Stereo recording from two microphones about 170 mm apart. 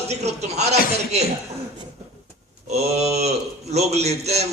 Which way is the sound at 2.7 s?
40° right (ahead or behind).